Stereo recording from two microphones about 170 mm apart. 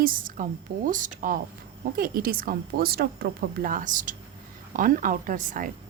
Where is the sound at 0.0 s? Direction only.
55° right (ahead or behind).